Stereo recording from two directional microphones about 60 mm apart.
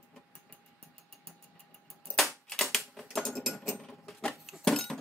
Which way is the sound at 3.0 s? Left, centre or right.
Centre.